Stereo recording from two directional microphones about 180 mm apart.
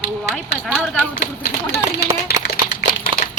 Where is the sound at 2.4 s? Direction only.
60° left (ahead or behind).